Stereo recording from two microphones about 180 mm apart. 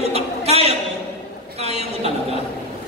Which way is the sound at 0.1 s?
35° right (ahead or behind).